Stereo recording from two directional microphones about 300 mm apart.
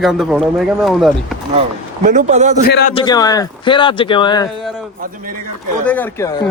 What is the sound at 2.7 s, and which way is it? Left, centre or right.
Speech, left.